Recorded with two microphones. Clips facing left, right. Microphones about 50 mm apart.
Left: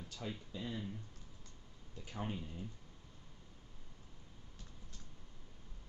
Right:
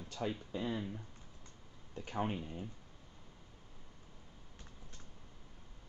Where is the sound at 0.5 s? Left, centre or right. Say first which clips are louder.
Right 5 dB; right.